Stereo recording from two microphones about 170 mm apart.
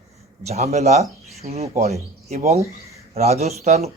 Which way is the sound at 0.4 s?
40° right (ahead or behind).